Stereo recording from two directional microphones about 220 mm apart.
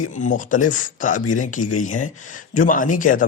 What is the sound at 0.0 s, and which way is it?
Speech, 35° left (ahead or behind).